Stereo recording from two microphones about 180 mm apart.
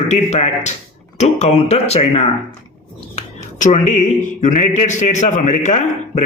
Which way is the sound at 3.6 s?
45° left (ahead or behind).